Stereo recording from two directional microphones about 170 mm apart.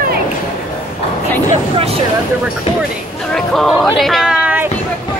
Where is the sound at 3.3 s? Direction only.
Centre (ahead or behind).